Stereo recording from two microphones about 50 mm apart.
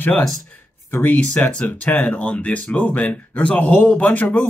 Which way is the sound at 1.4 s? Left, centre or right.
Left.